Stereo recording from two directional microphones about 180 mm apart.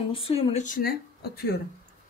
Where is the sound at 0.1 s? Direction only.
30° left (ahead or behind).